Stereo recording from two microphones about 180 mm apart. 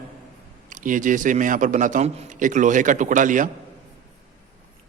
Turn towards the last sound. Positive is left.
turn(degrees=-45)  # may be behind; listen again after turning